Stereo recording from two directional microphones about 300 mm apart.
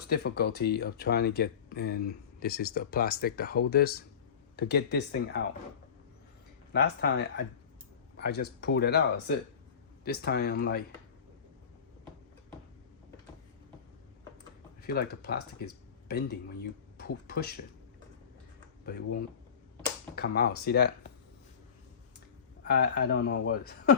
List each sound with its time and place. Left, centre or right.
0.0 s speech: left
6.7 s speech: left
14.8 s speech: left
18.9 s speech: left
22.6 s speech: left